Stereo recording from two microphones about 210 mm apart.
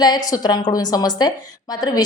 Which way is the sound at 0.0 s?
20° left (ahead or behind).